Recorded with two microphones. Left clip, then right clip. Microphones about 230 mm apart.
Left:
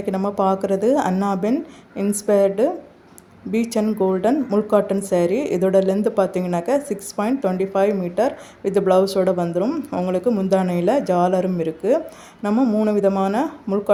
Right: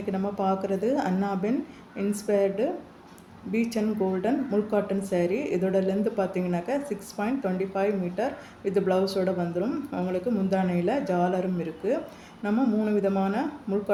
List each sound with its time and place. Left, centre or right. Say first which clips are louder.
0.0 s speech: left 8 dB; left